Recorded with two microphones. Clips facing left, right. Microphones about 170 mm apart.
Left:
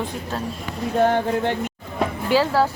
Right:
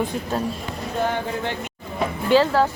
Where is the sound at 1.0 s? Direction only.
65° left (ahead or behind).